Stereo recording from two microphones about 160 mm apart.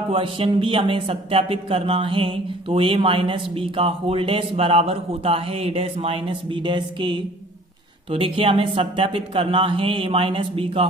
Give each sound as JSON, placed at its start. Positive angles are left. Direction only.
{"t": 0.1, "sound": "speech", "side_deg": -35}